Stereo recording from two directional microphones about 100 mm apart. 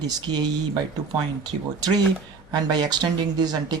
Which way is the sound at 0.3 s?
45° right (ahead or behind).